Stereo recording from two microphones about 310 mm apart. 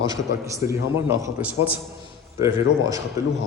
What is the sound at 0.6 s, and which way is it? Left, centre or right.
A man's voice, centre.